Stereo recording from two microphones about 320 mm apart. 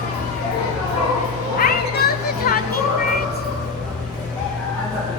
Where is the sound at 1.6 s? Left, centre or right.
Left.